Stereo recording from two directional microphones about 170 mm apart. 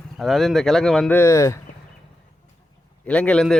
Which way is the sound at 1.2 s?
15° left (ahead or behind).